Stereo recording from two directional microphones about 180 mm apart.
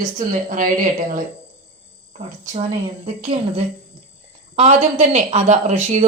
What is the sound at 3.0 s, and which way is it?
Speech, 35° right (ahead or behind).